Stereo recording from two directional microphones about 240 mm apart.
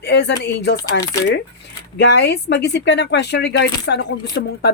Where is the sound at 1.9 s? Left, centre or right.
Left.